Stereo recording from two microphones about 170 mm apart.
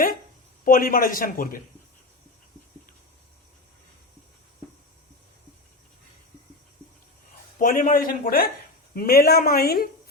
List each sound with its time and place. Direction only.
0.6 s a man's voice: 55° left (ahead or behind)
7.6 s a man's voice: 50° left (ahead or behind)